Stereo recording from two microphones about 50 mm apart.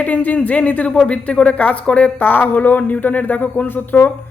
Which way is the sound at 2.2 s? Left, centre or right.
Left.